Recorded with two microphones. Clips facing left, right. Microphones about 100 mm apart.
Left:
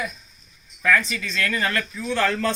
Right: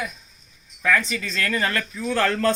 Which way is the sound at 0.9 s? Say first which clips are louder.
Left 1 dB; 25° right (ahead or behind).